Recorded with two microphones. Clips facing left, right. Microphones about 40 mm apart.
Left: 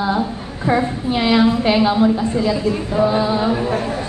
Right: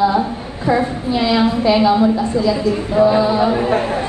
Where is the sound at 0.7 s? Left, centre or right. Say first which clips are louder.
Right 1 dB; left.